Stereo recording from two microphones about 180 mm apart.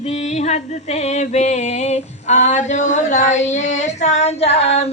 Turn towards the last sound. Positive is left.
turn(degrees=35)  # may be behind; listen again after turning